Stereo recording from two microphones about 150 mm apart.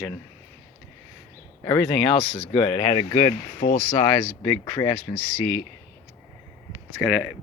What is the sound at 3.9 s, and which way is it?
Speech, 45° left (ahead or behind).